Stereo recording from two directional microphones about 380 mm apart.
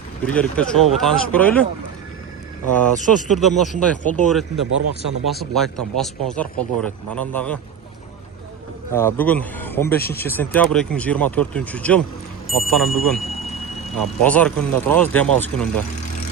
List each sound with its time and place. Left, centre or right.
0.3 s speech: centre
3.2 s speech: centre
4.0 s speech: centre
4.5 s speech: right
5.2 s speech: centre
8.9 s speech: centre